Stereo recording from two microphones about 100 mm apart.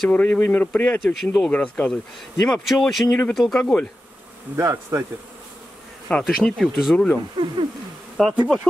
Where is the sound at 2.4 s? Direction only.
Centre (ahead or behind).